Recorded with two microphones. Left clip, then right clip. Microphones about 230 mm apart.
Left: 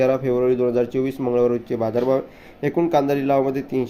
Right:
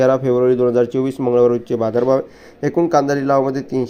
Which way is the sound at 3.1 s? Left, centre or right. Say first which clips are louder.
Right 3 dB; centre.